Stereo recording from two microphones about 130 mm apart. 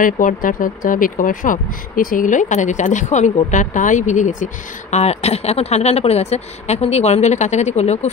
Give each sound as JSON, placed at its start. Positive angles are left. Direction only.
{"t": 0.0, "sound": "speech", "side_deg": 90}
{"t": 4.9, "sound": "speech", "side_deg": 55}